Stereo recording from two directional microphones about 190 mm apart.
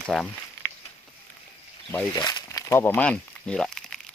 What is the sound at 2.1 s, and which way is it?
Crumpling, 20° left (ahead or behind).